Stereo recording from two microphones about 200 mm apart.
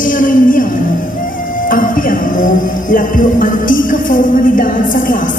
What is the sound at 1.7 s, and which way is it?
Music, 45° left (ahead or behind).